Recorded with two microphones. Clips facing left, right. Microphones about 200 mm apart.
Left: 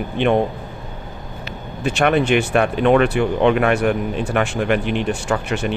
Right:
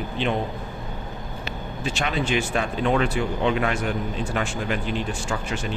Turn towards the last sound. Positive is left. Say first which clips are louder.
# left 7 dB
turn(degrees=65)  # may be behind; listen again after turning